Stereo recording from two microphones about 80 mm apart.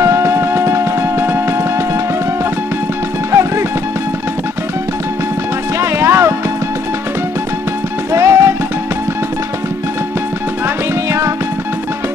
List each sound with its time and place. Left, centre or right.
0.0 s music: right
3.3 s music: right
5.8 s music: right
8.1 s music: right
11.1 s music: right